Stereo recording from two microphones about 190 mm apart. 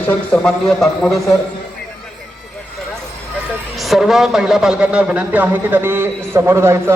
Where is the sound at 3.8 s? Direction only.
Centre (ahead or behind).